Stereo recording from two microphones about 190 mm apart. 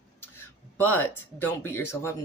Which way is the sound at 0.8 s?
10° left (ahead or behind).